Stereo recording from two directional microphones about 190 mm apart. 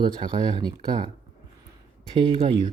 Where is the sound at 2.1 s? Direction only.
25° right (ahead or behind).